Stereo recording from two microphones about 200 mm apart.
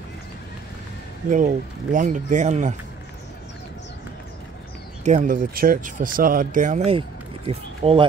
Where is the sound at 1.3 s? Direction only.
40° right (ahead or behind).